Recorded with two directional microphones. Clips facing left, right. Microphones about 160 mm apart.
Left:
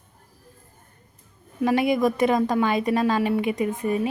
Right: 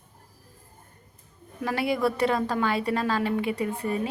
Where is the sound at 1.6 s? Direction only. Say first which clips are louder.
Left 5 dB; 20° left (ahead or behind).